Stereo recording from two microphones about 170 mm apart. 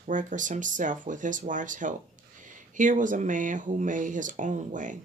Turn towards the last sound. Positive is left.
turn(degrees=-50)  # may be behind; listen again after turning